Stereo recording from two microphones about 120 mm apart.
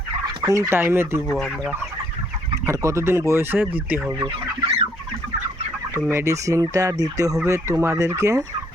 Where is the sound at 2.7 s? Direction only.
25° right (ahead or behind).